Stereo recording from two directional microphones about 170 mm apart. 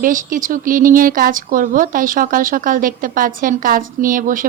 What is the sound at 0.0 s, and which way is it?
Speech, 50° right (ahead or behind).